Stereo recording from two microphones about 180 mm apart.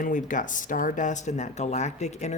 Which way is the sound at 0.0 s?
45° left (ahead or behind).